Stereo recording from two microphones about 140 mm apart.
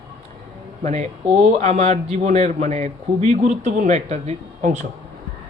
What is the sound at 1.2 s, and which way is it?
Speech, 5° right (ahead or behind).